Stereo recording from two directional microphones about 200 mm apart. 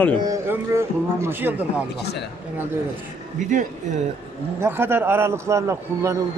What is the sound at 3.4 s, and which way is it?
Speech, 40° right (ahead or behind).